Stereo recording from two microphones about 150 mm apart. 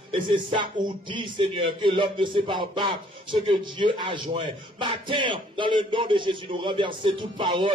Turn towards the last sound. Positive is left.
turn(degrees=-30)  # may be behind; listen again after turning